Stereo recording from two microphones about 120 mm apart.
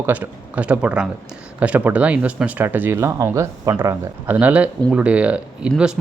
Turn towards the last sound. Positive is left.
turn(degrees=-10)  # may be behind; listen again after turning